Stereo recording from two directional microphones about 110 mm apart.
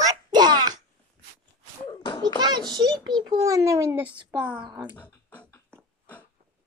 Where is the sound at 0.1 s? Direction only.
40° right (ahead or behind).